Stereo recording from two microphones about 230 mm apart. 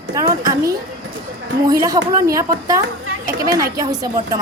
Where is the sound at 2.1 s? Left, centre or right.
Centre.